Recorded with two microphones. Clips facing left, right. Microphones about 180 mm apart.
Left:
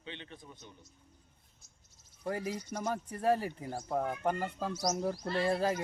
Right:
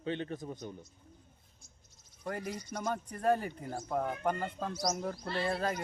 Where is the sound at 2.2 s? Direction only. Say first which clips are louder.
Left 2 dB; 10° left (ahead or behind).